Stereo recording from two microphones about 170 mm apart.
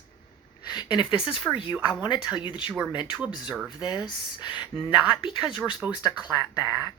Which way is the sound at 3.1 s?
5° right (ahead or behind).